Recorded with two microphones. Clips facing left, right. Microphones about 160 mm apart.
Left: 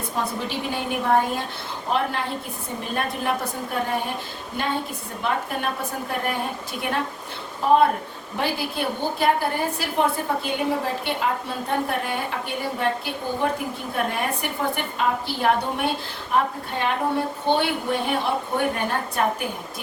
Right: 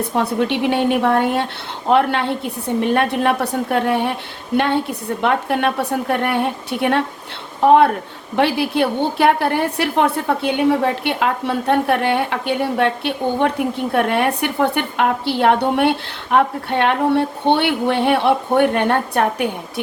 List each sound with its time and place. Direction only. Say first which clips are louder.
0.1 s a woman's voice: right 7 dB; 65° right (ahead or behind)